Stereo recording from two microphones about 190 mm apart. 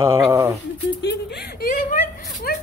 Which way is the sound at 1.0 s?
60° left (ahead or behind).